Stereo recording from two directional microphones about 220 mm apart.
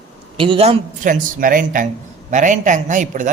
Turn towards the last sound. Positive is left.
turn(degrees=-35)  # may be behind; listen again after turning